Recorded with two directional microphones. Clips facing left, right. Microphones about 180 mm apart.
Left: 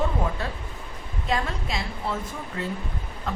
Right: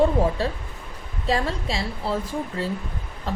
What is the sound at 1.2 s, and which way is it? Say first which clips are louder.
Speech: right 4 dB; 30° right (ahead or behind).